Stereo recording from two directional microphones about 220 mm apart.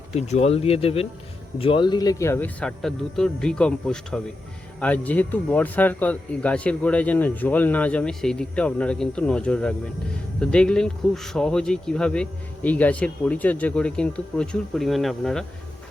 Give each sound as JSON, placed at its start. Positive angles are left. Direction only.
{"t": 0.1, "sound": "speech", "side_deg": 30}